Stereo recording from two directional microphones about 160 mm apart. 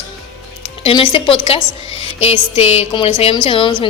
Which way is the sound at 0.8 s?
35° left (ahead or behind).